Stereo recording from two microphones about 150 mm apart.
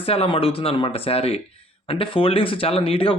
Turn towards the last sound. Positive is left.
turn(degrees=40)  # may be behind; listen again after turning